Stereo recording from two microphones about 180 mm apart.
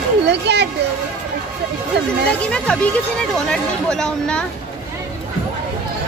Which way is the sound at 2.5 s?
5° left (ahead or behind).